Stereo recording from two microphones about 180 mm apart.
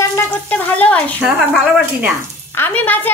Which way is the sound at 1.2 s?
5° right (ahead or behind).